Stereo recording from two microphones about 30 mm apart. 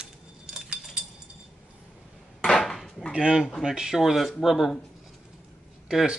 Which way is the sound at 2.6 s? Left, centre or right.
Centre.